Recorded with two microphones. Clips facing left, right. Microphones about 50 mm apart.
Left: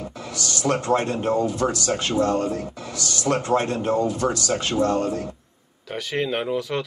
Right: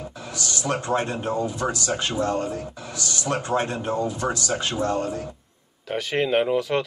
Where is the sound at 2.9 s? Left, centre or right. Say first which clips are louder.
Even; right.